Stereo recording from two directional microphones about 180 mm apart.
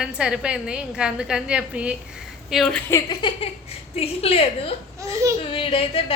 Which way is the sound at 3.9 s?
35° left (ahead or behind).